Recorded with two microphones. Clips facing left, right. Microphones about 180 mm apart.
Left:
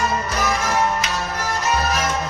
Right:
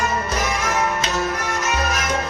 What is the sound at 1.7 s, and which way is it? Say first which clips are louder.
Music: left 3 dB; 35° left (ahead or behind).